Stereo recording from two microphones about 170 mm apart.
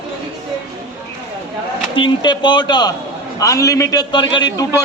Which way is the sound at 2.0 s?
25° left (ahead or behind).